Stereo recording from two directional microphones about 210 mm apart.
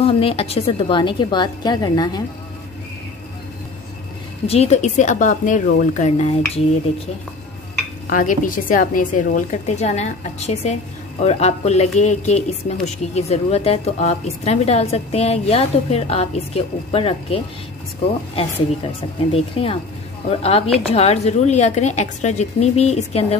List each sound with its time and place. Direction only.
0.0 s a woman's voice: 25° left (ahead or behind)
4.5 s a woman's voice: 30° left (ahead or behind)
8.1 s a woman's voice: 40° left (ahead or behind)